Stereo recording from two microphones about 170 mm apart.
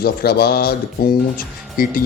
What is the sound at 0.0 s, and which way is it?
Speech, 65° left (ahead or behind).